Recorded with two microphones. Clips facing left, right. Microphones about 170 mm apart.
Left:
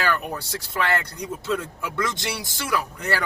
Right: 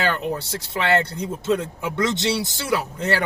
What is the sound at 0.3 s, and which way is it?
Speech, 25° right (ahead or behind).